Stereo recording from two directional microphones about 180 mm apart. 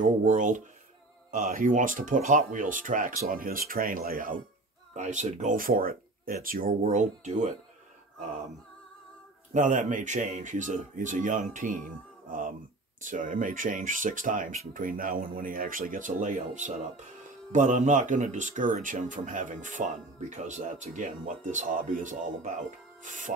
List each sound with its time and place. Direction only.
0.0 s speech: 45° right (ahead or behind)
4.9 s speech: 40° right (ahead or behind)
6.8 s speech: 40° right (ahead or behind)
9.5 s speech: 45° right (ahead or behind)